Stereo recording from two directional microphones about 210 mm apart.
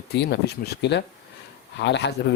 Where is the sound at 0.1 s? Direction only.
50° left (ahead or behind).